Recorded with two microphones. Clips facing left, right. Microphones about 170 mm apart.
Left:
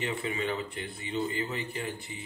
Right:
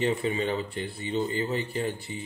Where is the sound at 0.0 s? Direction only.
35° right (ahead or behind).